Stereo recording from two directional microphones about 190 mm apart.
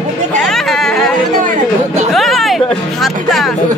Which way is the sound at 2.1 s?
Centre (ahead or behind).